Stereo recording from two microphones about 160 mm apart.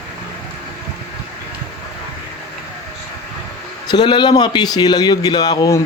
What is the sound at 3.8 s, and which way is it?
A man's voice, 25° left (ahead or behind).